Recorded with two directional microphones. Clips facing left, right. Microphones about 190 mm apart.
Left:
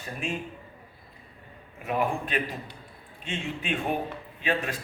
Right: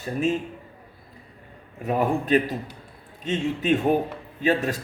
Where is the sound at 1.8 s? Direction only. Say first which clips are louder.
Right 5 dB; 40° right (ahead or behind).